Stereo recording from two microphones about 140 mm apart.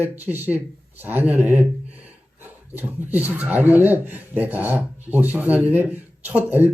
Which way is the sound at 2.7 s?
15° right (ahead or behind).